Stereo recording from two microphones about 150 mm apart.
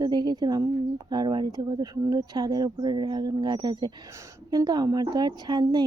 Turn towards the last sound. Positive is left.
turn(degrees=-30)  # may be behind; listen again after turning